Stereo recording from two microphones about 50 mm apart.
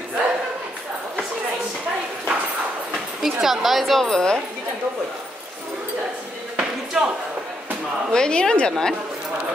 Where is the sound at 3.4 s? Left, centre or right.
Centre.